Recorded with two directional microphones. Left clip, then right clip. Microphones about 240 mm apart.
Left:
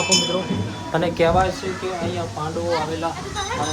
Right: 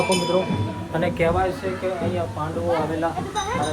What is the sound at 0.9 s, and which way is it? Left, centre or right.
Speech, left.